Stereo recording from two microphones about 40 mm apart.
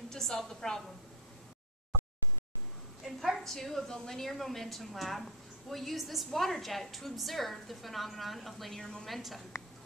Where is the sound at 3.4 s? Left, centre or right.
Centre.